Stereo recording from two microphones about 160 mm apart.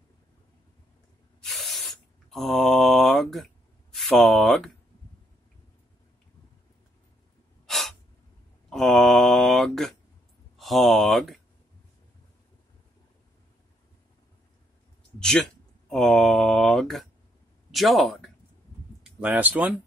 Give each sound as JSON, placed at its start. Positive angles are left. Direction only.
{"t": 1.4, "sound": "spray", "side_deg": 0}
{"t": 7.6, "sound": "gasp", "side_deg": 0}
{"t": 8.6, "sound": "a sound", "side_deg": 0}
{"t": 15.1, "sound": "a sound", "side_deg": 5}
{"t": 15.9, "sound": "mantra", "side_deg": 0}
{"t": 17.6, "sound": "speech", "side_deg": 0}